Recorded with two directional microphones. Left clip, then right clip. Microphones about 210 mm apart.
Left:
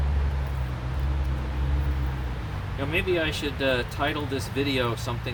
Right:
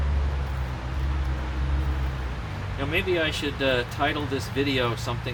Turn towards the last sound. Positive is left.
turn(degrees=5)  # may be behind; listen again after turning